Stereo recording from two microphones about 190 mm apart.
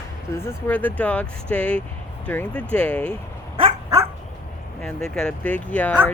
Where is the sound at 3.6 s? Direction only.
15° right (ahead or behind).